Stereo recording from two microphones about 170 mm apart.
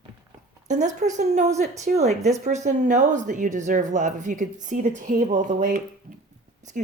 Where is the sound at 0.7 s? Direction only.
45° right (ahead or behind).